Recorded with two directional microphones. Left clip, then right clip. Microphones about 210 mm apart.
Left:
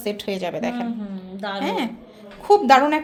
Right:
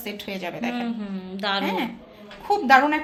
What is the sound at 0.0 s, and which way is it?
Speech, 50° left (ahead or behind).